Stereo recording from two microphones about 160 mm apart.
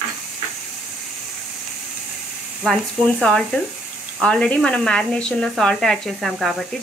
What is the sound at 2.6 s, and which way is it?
Speech, centre (ahead or behind).